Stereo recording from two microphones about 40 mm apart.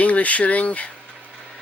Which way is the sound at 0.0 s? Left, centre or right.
Left.